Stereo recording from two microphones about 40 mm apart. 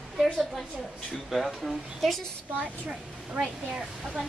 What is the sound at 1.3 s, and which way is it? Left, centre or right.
Speech, centre.